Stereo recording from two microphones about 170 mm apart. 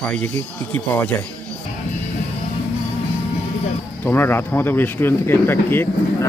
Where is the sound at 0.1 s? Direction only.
10° left (ahead or behind).